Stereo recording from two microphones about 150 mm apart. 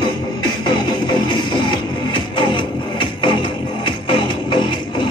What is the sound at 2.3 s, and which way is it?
Music, 30° left (ahead or behind).